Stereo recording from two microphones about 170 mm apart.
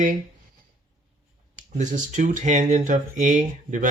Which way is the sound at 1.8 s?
45° right (ahead or behind).